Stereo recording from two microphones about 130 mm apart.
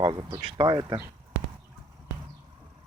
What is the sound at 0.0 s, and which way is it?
Speech, 45° right (ahead or behind).